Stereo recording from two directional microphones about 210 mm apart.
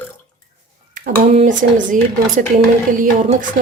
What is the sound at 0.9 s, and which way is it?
Speech, 40° right (ahead or behind).